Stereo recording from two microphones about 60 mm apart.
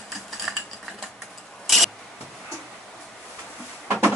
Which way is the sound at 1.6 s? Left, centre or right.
Centre.